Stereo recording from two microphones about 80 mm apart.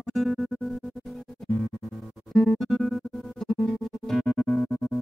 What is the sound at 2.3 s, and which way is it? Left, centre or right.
Music, centre.